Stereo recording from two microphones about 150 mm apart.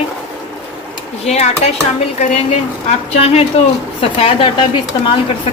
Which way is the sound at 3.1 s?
40° left (ahead or behind).